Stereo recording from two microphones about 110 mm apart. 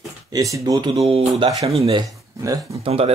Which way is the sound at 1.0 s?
60° right (ahead or behind).